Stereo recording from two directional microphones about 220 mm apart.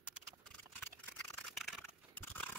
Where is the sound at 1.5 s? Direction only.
Centre (ahead or behind).